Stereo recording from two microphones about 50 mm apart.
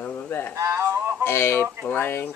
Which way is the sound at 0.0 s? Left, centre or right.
Left.